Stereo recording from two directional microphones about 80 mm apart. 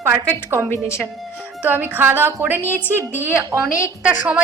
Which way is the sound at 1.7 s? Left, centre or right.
Right.